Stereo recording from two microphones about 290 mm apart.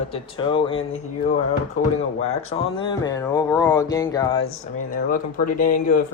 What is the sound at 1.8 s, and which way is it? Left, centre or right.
Speech, left.